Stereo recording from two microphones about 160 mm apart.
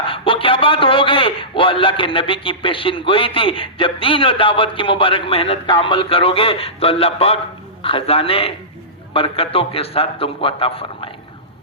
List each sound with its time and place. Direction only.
0.0 s a man's voice: 35° left (ahead or behind)